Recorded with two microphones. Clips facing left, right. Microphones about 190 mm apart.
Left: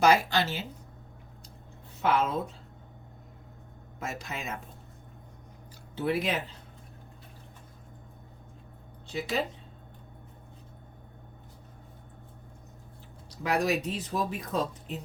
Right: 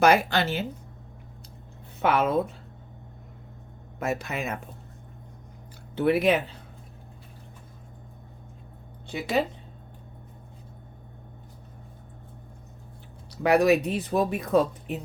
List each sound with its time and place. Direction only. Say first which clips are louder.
0.0 s speech: right 3 dB; 60° right (ahead or behind)
2.0 s speech: right 3 dB; 65° right (ahead or behind)
4.0 s speech: right 8 dB; 65° right (ahead or behind)
6.0 s speech: right 7 dB; 65° right (ahead or behind)
9.1 s speech: right 5 dB; 60° right (ahead or behind)
13.4 s speech: right 8 dB; 65° right (ahead or behind)